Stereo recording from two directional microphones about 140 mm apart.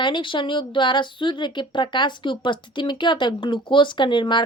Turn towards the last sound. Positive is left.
turn(degrees=35)  # may be behind; listen again after turning